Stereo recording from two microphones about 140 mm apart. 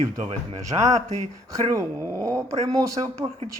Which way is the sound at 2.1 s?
20° right (ahead or behind).